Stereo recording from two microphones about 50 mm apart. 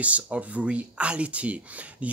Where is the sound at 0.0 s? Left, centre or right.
Right.